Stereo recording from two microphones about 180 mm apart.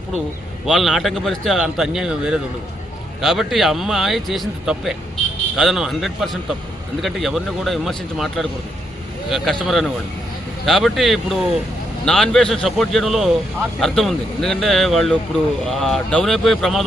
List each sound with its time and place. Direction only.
0.7 s speech: centre (ahead or behind)